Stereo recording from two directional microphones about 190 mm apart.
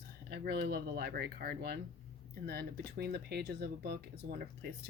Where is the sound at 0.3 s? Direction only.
60° right (ahead or behind).